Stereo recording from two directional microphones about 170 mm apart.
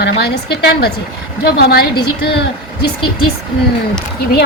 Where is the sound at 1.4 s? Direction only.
65° left (ahead or behind).